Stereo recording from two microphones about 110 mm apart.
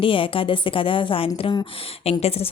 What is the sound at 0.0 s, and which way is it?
Speech, 50° left (ahead or behind).